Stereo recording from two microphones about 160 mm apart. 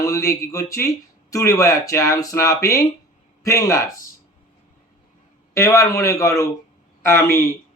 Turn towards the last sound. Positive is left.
turn(degrees=15)  # may be behind; listen again after turning